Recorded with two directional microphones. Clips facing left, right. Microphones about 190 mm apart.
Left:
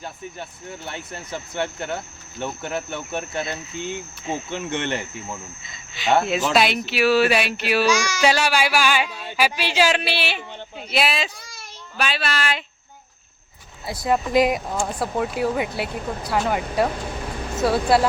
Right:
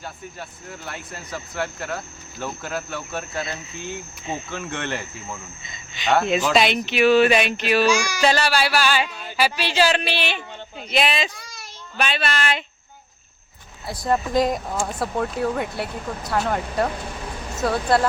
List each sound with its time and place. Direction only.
0.0 s speech: 25° left (ahead or behind)
5.3 s speech: 5° left (ahead or behind)
7.9 s child singing: 15° right (ahead or behind)
8.2 s speech: 10° left (ahead or behind)
13.8 s speech: 5° left (ahead or behind)